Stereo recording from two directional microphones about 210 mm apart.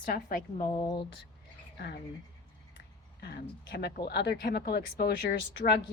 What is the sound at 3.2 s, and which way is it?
A man's voice, 50° left (ahead or behind).